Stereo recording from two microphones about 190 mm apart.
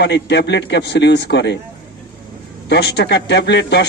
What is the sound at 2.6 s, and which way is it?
A man's voice, 65° left (ahead or behind).